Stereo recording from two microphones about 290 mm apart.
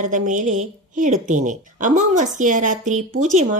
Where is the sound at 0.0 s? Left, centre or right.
Right.